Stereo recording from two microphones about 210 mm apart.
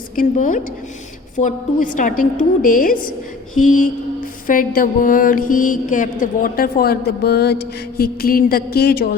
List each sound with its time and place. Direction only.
0.2 s a woman's voice: 40° left (ahead or behind)
3.8 s mantra: 40° left (ahead or behind)